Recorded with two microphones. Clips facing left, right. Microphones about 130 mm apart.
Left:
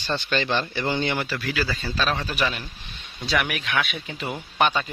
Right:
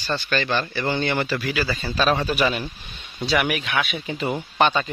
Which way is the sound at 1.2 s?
5° right (ahead or behind).